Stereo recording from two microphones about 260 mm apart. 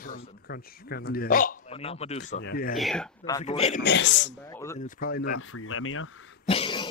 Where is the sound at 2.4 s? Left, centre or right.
Left.